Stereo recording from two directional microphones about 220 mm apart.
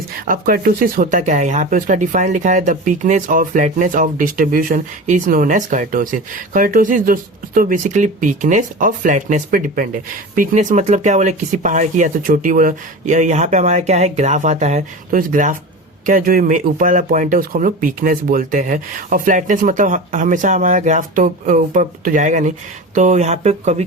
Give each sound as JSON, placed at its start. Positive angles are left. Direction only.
{"t": 0.3, "sound": "speech", "side_deg": -40}